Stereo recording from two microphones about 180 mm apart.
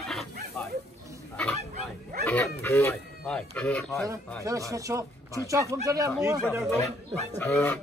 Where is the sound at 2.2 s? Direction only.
10° left (ahead or behind).